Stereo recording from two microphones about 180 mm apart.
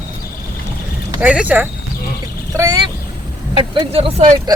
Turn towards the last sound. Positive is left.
turn(degrees=-35)  # may be behind; listen again after turning